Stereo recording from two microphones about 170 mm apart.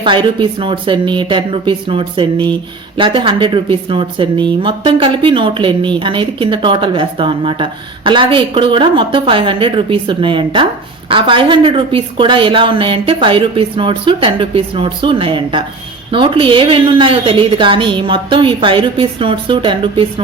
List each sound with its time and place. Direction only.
0.0 s a woman's voice: 30° right (ahead or behind)